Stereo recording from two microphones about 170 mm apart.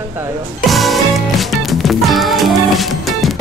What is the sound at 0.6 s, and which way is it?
Music, centre (ahead or behind).